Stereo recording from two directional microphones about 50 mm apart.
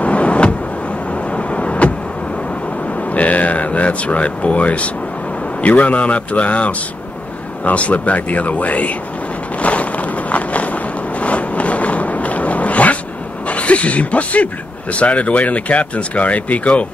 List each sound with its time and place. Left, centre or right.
0.0 s vehicle: left
3.2 s speech: left
9.6 s a sound: left
13.5 s speech: left